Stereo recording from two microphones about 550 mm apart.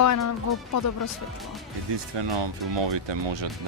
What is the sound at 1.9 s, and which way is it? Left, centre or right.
Speech, right.